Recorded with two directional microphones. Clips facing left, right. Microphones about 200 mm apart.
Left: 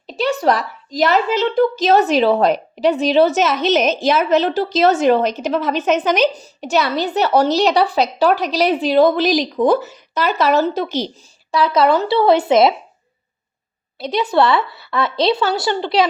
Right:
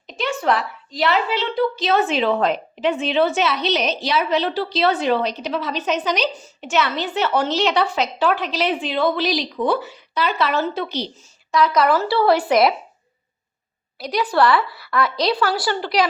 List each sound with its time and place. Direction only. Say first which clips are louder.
0.1 s speech: left 4 dB; 35° left (ahead or behind)
11.5 s a woman's voice: left 2 dB; 30° left (ahead or behind)
14.0 s a woman's voice: left 2 dB; 25° left (ahead or behind)